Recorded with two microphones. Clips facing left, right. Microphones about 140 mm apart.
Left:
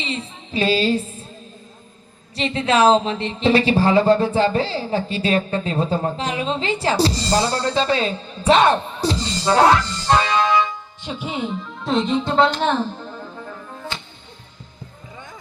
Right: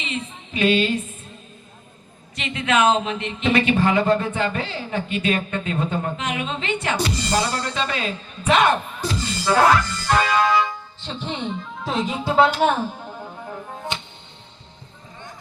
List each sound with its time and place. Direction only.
0.0 s a woman's voice: 30° left (ahead or behind)
2.3 s a woman's voice: 35° left (ahead or behind)
11.0 s speech: 10° left (ahead or behind); by 12.9 s 10° right (ahead or behind)
13.9 s music: 20° right (ahead or behind)